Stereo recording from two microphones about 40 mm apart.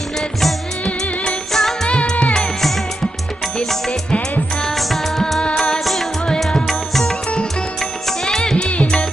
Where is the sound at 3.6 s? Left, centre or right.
Centre.